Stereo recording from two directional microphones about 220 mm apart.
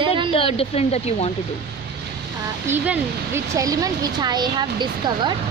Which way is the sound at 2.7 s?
10° right (ahead or behind).